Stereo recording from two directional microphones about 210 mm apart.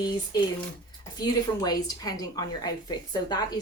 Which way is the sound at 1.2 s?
20° left (ahead or behind).